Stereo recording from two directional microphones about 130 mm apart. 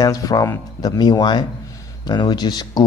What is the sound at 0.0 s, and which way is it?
A man's voice, 25° left (ahead or behind).